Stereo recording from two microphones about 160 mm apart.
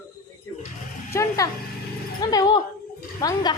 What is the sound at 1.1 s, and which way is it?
A woman's voice, 20° left (ahead or behind).